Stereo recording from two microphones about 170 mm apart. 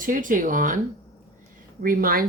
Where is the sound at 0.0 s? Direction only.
50° right (ahead or behind).